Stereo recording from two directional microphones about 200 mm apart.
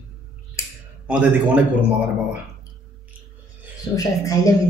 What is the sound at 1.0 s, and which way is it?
Speech, 5° right (ahead or behind).